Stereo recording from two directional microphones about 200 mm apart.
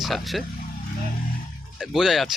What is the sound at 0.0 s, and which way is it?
Speech, centre (ahead or behind).